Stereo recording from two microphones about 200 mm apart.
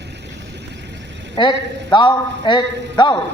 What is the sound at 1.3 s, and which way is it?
A man's voice, 25° left (ahead or behind).